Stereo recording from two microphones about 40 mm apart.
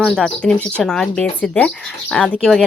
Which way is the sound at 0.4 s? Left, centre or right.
Centre.